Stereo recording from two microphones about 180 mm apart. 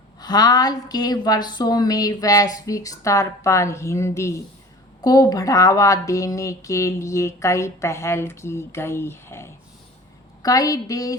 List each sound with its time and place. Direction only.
0.2 s a woman's voice: 20° left (ahead or behind)